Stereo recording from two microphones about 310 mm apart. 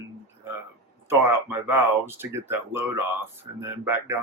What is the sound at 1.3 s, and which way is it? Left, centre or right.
Speech, centre.